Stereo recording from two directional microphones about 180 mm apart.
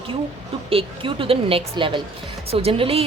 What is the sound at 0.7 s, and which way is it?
Speech, 30° right (ahead or behind).